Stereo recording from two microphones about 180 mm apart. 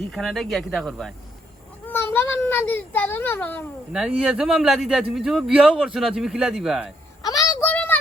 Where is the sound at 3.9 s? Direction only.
5° right (ahead or behind).